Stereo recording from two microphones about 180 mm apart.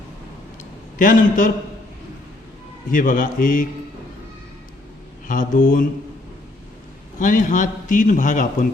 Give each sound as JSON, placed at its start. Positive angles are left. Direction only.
{"t": 0.9, "sound": "a man's voice", "side_deg": 45}
{"t": 2.9, "sound": "a man's voice", "side_deg": 50}
{"t": 5.3, "sound": "a man's voice", "side_deg": 45}
{"t": 7.2, "sound": "a man's voice", "side_deg": 45}